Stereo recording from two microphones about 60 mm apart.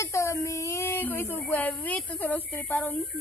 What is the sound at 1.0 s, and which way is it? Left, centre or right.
A woman's voice, left.